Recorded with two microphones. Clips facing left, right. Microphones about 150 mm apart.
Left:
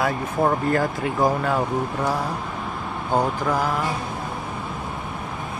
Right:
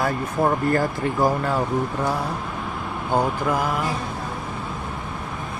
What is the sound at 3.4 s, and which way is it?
Speech, 5° right (ahead or behind).